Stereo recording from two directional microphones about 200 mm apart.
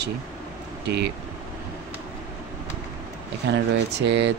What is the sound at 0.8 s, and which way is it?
Speech, 55° right (ahead or behind).